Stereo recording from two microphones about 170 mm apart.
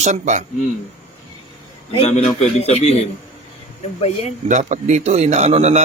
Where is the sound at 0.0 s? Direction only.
45° right (ahead or behind).